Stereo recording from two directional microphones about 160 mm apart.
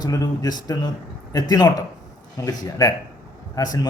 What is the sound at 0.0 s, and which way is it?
A man's voice, 25° left (ahead or behind).